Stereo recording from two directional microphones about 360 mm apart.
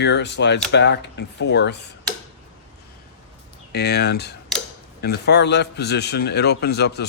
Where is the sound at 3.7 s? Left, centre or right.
Left.